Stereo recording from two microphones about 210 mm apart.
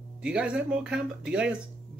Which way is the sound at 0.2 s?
5° right (ahead or behind).